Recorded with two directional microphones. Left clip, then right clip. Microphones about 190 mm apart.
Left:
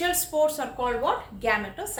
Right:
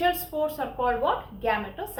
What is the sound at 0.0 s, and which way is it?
A woman's voice, 30° left (ahead or behind).